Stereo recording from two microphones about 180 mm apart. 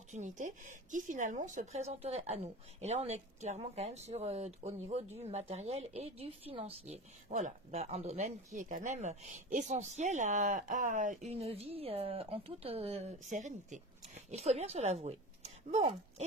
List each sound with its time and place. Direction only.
0.1 s speech: 40° right (ahead or behind)